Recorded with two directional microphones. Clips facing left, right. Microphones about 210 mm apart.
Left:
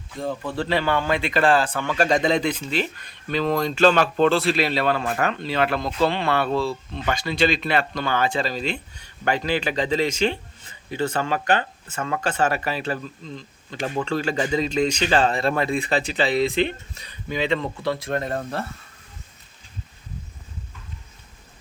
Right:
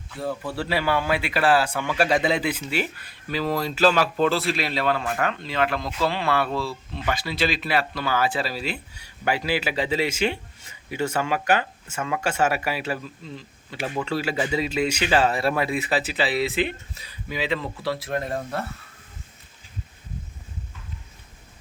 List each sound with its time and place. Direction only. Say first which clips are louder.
0.2 s speech: left 2 dB; 5° right (ahead or behind)
4.7 s speech: left 2 dB; 30° left (ahead or behind)
6.1 s speech: left 2 dB; 5° right (ahead or behind)
6.3 s speech: left 2 dB; 25° left (ahead or behind)
7.1 s speech: left 3 dB; 5° right (ahead or behind)